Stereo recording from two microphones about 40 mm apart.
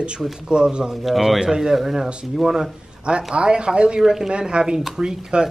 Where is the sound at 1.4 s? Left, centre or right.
Centre.